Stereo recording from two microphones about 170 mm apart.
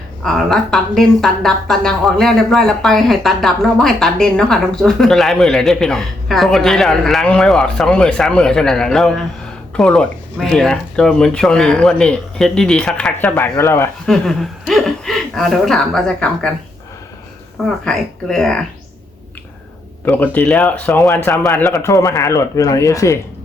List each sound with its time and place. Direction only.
0.2 s speech: centre (ahead or behind)
14.1 s speech: centre (ahead or behind)
17.8 s speech: 5° left (ahead or behind)
20.1 s a man's voice: 10° left (ahead or behind)